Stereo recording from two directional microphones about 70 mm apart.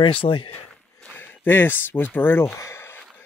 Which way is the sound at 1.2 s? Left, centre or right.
Left.